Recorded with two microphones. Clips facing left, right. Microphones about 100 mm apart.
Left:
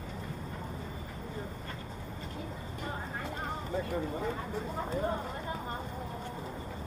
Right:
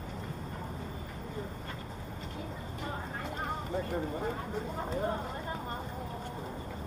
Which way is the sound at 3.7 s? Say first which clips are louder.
Left 2 dB; 45° right (ahead or behind).